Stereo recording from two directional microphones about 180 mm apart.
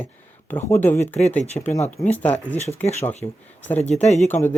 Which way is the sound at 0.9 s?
40° left (ahead or behind).